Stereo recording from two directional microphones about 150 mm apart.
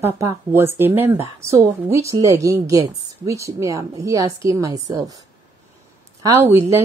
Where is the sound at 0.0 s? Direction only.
20° right (ahead or behind).